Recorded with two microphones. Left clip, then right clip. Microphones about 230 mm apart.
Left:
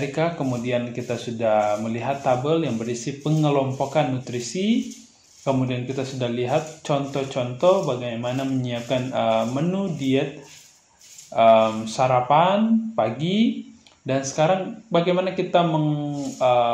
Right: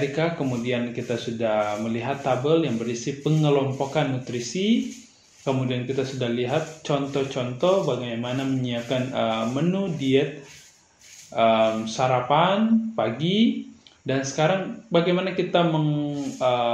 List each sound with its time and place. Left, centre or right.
0.1 s speech: left
11.3 s speech: left